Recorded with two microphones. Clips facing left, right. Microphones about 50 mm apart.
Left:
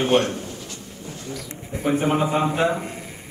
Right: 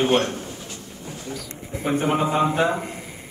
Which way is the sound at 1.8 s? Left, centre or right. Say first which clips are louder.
Left 1 dB; centre.